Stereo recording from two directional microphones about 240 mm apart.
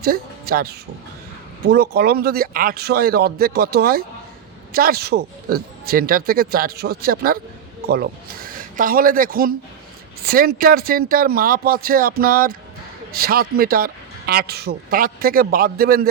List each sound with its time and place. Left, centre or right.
0.0 s speech: right